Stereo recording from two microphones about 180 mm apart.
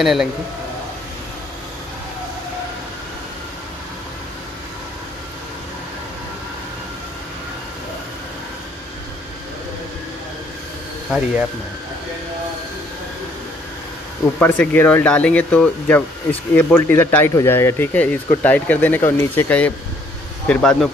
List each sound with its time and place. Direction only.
0.0 s speech: centre (ahead or behind)
14.4 s speech: 10° left (ahead or behind)